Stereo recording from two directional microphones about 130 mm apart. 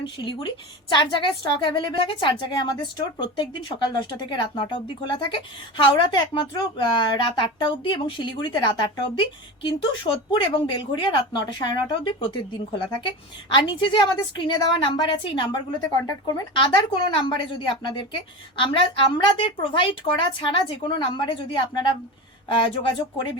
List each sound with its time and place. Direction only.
0.0 s speech: 40° left (ahead or behind)